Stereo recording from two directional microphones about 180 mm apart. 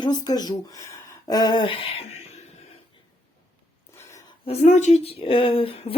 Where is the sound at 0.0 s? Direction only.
20° left (ahead or behind).